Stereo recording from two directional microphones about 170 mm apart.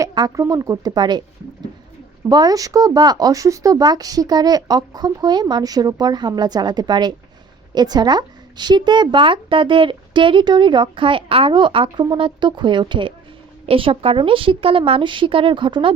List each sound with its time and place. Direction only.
0.0 s speech: 20° right (ahead or behind)
2.3 s a woman's voice: 20° right (ahead or behind)